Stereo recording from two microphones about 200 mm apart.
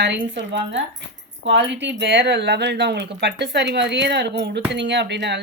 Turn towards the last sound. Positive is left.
turn(degrees=-60)  # may be behind; listen again after turning